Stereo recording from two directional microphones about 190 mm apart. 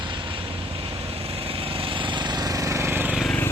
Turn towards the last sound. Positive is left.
turn(degrees=5)  # may be behind; listen again after turning